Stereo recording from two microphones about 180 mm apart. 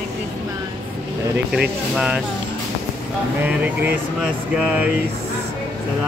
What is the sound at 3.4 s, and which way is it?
Speech, 10° right (ahead or behind).